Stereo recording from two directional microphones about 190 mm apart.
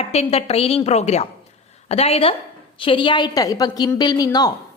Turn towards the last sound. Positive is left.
turn(degrees=20)  # may be behind; listen again after turning